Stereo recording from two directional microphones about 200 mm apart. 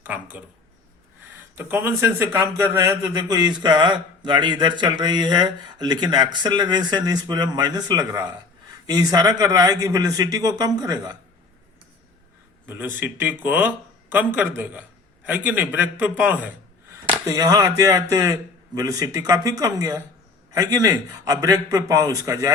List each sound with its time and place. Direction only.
0.0 s speech: 5° right (ahead or behind)
1.5 s a man's voice: 10° right (ahead or behind)
12.6 s speech: 10° right (ahead or behind)